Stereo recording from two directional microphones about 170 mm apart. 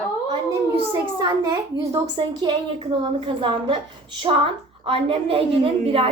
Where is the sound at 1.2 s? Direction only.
25° right (ahead or behind).